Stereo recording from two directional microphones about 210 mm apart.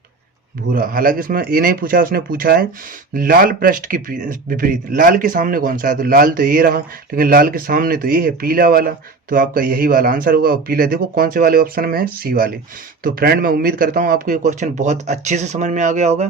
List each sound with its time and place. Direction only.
0.7 s speech: 45° right (ahead or behind)